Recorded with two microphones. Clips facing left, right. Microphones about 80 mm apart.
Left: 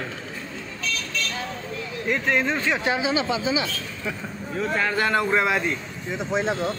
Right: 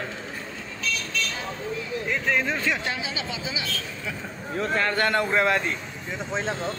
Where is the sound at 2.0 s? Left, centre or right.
Centre.